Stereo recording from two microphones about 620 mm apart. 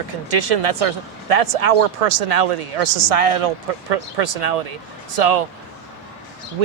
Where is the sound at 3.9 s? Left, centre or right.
Right.